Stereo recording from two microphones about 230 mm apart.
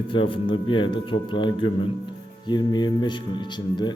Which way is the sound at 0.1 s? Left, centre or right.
Left.